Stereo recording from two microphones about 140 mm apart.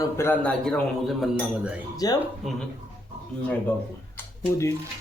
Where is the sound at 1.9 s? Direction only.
25° left (ahead or behind).